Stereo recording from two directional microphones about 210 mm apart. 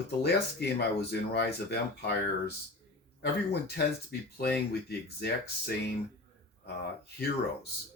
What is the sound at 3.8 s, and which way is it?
Speech, 50° left (ahead or behind).